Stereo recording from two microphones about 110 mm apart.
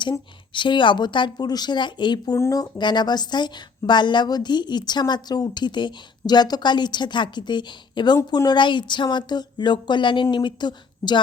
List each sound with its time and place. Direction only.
0.0 s a woman's voice: 45° left (ahead or behind)